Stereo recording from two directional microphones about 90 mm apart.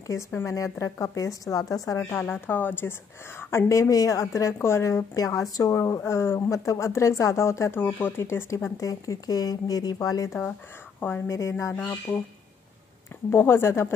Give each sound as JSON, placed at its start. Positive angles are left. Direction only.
{"t": 0.5, "sound": "a woman's voice", "side_deg": 35}
{"t": 2.1, "sound": "a woman's voice", "side_deg": 20}
{"t": 13.3, "sound": "speech", "side_deg": 25}